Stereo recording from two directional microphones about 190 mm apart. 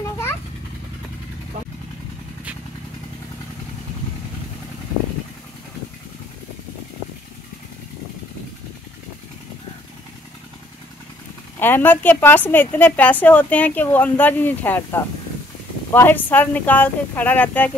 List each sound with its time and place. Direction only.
11.6 s a woman's voice: 10° left (ahead or behind)